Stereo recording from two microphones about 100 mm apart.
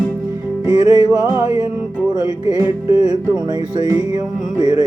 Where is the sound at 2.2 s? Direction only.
40° right (ahead or behind).